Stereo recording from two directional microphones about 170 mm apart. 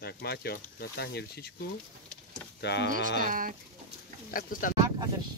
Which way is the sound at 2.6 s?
90° left.